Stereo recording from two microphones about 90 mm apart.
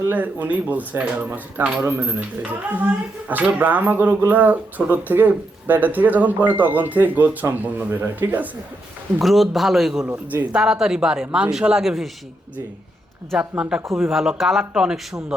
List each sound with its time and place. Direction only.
0.0 s speech: 20° right (ahead or behind)
9.2 s a man's voice: centre (ahead or behind)
13.6 s a man's voice: 10° right (ahead or behind)